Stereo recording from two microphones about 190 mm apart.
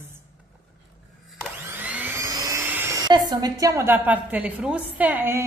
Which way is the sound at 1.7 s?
10° right (ahead or behind).